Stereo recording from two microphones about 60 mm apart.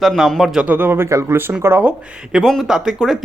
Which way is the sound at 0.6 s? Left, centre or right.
Right.